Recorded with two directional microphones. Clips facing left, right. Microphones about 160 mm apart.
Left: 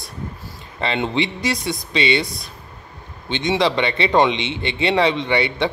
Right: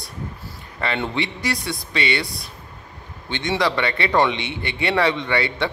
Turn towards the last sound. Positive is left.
turn(degrees=20)  # may be behind; listen again after turning